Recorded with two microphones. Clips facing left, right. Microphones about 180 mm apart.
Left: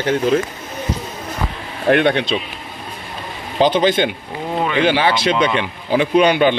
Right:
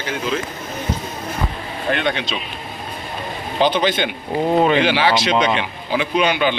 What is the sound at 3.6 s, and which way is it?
Speech, 45° left (ahead or behind).